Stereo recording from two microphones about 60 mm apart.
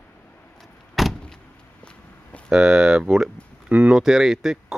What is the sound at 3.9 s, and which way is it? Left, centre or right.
Speech, centre.